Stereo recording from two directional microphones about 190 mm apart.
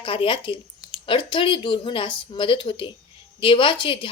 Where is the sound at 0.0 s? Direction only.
25° left (ahead or behind).